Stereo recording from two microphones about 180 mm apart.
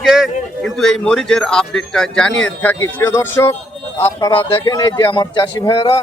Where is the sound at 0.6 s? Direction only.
Centre (ahead or behind).